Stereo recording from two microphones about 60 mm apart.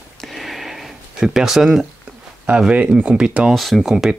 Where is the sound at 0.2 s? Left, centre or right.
Centre.